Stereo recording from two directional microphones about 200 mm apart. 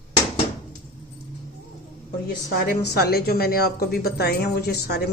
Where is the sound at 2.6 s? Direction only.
50° left (ahead or behind).